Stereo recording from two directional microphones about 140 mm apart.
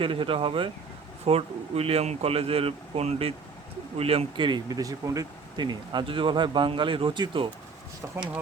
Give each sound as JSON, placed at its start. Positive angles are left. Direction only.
{"t": 0.0, "sound": "speech", "side_deg": -40}
{"t": 8.0, "sound": "speech", "side_deg": -20}